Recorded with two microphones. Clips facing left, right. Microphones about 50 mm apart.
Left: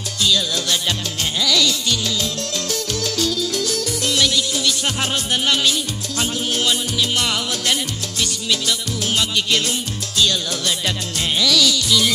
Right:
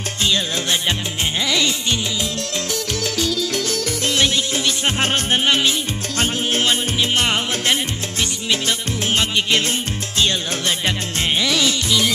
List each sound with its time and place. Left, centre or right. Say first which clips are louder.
0.2 s music: left 1 dB; right
4.1 s music: even; right
11.3 s music: left 3 dB; right